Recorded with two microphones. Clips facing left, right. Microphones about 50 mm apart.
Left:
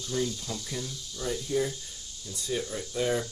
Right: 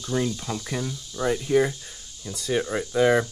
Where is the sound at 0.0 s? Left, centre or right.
Right.